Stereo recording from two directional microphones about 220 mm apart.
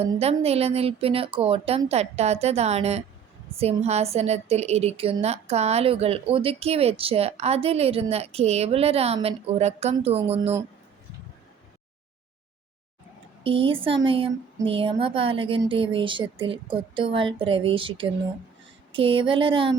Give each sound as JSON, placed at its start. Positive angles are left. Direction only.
{"t": 0.0, "sound": "a woman's voice", "side_deg": -30}
{"t": 13.4, "sound": "a woman's voice", "side_deg": -25}